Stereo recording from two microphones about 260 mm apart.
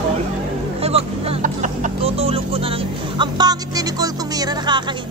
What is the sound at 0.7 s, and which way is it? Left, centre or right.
Speech, right.